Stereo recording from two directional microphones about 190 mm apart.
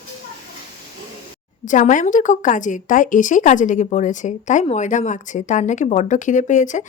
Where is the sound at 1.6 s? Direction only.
40° left (ahead or behind).